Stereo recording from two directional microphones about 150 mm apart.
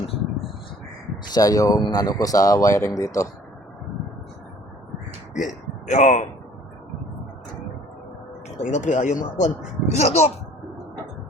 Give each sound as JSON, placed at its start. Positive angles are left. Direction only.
{"t": 0.0, "sound": "a sound", "side_deg": 40}
{"t": 1.2, "sound": "speech", "side_deg": 25}
{"t": 5.4, "sound": "a man's voice", "side_deg": 55}
{"t": 8.6, "sound": "speech", "side_deg": 55}